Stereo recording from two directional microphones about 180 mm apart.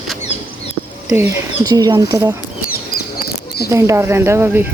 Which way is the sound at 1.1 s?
15° right (ahead or behind).